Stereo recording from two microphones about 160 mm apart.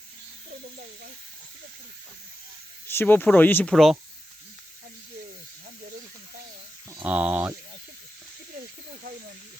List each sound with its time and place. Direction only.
0.5 s speech: 70° right (ahead or behind)
2.8 s speech: 15° left (ahead or behind)
7.0 s speech: 10° right (ahead or behind)